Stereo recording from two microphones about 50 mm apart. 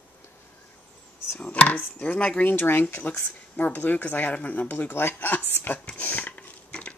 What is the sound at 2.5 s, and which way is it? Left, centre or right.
A woman's voice, left.